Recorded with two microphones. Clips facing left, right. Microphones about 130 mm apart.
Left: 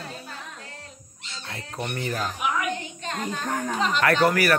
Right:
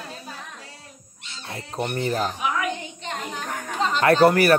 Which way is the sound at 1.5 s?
25° right (ahead or behind).